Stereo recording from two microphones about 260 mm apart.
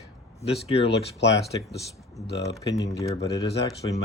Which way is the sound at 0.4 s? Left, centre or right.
Left.